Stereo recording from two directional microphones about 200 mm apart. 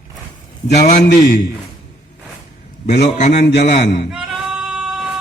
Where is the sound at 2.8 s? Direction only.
35° left (ahead or behind).